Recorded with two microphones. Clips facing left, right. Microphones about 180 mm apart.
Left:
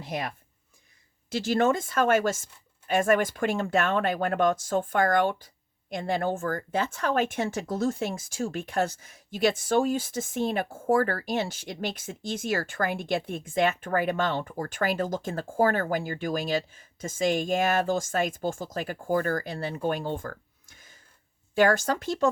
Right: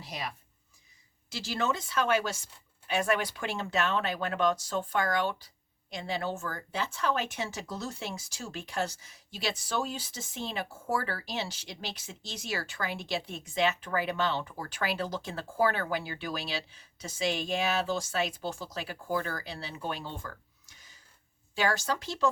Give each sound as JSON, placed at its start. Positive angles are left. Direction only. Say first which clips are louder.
{"t": 0.0, "sound": "speech", "louder": "left 6 dB", "side_deg": 50}